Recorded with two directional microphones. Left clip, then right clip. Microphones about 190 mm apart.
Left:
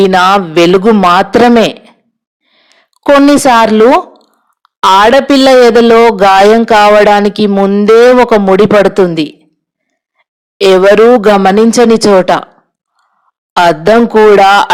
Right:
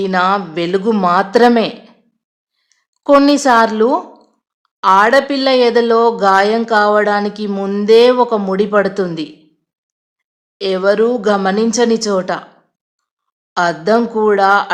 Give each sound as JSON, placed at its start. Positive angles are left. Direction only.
{"t": 0.0, "sound": "a man's voice", "side_deg": 45}
{"t": 7.5, "sound": "a man's voice", "side_deg": 25}
{"t": 10.6, "sound": "a man's voice", "side_deg": 40}
{"t": 13.5, "sound": "speech", "side_deg": 45}